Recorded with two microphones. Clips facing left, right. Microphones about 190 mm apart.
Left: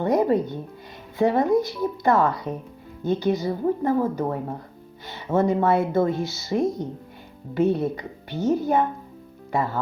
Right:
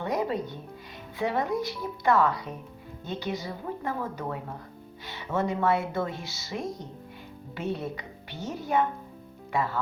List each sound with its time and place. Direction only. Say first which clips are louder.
0.0 s music: left 9 dB; 45° left (ahead or behind)
1.2 s speech: left 8 dB; 45° left (ahead or behind)